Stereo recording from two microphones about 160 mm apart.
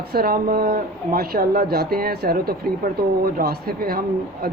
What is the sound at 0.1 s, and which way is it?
Speech, 70° right (ahead or behind).